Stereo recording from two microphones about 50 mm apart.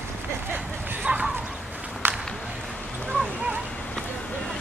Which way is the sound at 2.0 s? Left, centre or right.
Right.